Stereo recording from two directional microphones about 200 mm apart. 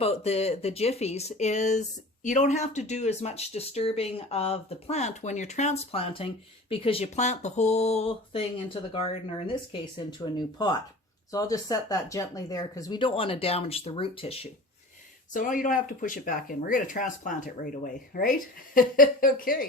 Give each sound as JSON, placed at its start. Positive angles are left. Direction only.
{"t": 0.0, "sound": "speech", "side_deg": 30}
{"t": 15.3, "sound": "speech", "side_deg": 40}